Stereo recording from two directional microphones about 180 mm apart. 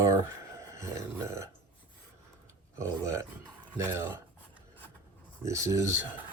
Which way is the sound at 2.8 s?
15° right (ahead or behind).